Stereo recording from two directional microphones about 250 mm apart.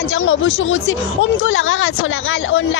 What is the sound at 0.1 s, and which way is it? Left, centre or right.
Speech, left.